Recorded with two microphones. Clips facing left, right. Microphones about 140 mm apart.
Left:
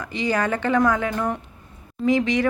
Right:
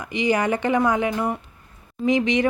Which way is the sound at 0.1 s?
15° right (ahead or behind).